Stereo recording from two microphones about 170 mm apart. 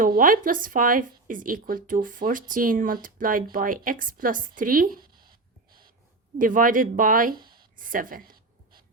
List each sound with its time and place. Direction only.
0.0 s speech: 55° right (ahead or behind)
6.4 s speech: 55° right (ahead or behind)
7.8 s a sound: 55° right (ahead or behind)